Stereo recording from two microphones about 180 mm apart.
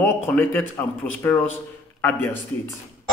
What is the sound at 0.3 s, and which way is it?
A man's voice, 10° left (ahead or behind).